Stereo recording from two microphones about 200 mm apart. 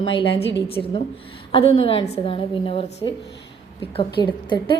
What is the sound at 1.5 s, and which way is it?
A woman's voice, 30° left (ahead or behind).